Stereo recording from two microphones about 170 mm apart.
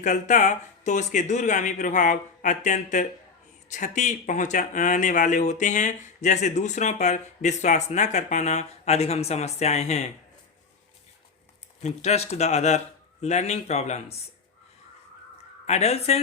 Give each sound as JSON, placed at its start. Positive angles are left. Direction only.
{"t": 0.0, "sound": "speech", "side_deg": 45}
{"t": 11.8, "sound": "speech", "side_deg": 40}
{"t": 15.6, "sound": "speech", "side_deg": 40}